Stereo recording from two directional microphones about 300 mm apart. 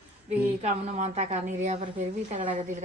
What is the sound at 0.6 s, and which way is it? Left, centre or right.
A woman's voice, right.